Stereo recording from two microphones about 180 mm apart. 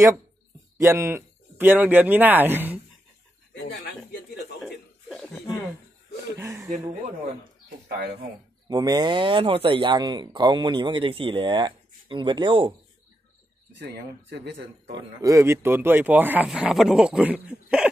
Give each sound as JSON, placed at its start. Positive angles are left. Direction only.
{"t": 0.7, "sound": "speech", "side_deg": -15}
{"t": 3.6, "sound": "speech", "side_deg": 70}
{"t": 4.6, "sound": "chuckle", "side_deg": 0}
{"t": 6.3, "sound": "speech", "side_deg": -15}
{"t": 8.6, "sound": "speech", "side_deg": -20}
{"t": 14.9, "sound": "speech", "side_deg": -15}